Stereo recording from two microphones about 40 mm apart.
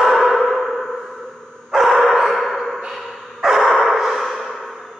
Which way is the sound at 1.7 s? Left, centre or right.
Centre.